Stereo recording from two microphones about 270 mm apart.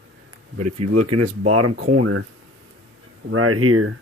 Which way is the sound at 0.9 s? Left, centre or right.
Right.